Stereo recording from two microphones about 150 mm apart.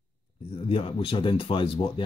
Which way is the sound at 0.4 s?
40° left (ahead or behind).